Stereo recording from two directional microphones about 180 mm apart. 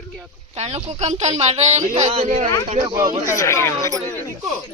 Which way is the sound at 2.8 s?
20° right (ahead or behind).